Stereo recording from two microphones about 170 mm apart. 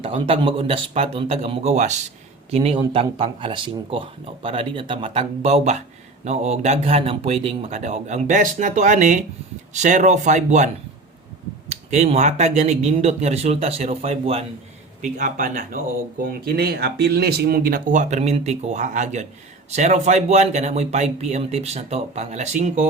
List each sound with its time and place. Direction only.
0.0 s speech: 35° right (ahead or behind)
11.7 s speech: 40° right (ahead or behind)
15.0 s speech: 50° right (ahead or behind)
16.3 s speech: 60° right (ahead or behind); by 22.9 s 40° right (ahead or behind)